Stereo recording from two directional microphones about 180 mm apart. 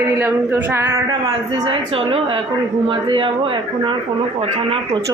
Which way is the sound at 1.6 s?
30° right (ahead or behind).